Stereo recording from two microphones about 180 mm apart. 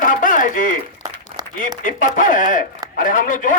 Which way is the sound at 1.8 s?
50° left (ahead or behind).